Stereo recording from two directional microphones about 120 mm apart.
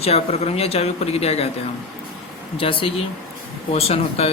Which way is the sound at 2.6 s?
50° left (ahead or behind).